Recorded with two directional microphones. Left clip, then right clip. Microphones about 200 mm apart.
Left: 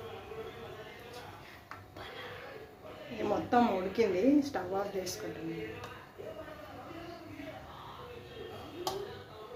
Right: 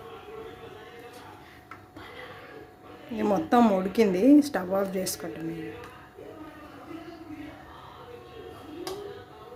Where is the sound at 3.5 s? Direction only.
55° right (ahead or behind).